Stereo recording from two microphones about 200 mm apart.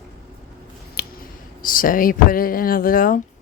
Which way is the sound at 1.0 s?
50° left (ahead or behind).